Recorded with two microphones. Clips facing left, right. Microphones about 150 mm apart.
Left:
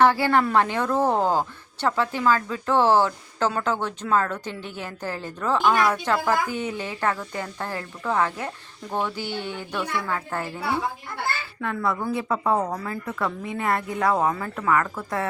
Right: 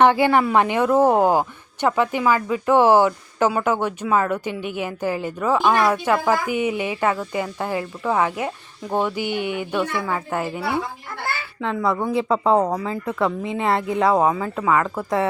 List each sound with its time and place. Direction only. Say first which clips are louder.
0.0 s a woman's voice: right 3 dB; 20° right (ahead or behind)